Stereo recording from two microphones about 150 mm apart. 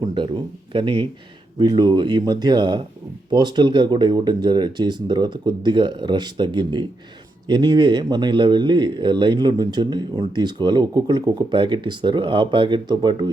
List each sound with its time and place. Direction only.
0.0 s speech: 30° right (ahead or behind)